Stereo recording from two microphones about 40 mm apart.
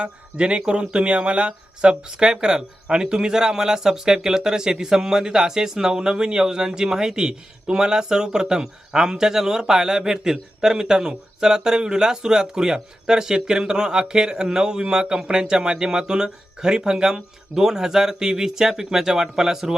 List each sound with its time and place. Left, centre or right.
0.0 s speech: right